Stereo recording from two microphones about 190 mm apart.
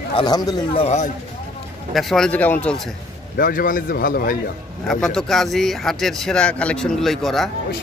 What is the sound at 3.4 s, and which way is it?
Speech, 45° left (ahead or behind).